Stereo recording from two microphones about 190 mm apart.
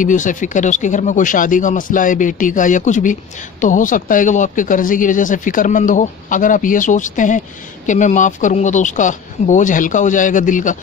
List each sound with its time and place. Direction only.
0.0 s speech: 40° left (ahead or behind)